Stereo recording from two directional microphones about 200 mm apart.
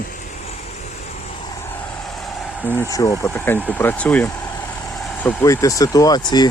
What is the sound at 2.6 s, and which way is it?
Speech, 10° left (ahead or behind).